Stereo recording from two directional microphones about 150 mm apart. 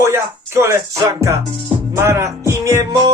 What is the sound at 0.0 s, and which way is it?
Speech, 20° right (ahead or behind).